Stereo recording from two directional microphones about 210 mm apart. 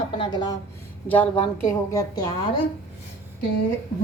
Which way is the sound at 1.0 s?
10° left (ahead or behind).